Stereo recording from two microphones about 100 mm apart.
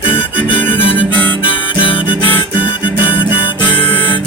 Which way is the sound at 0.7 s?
65° left (ahead or behind).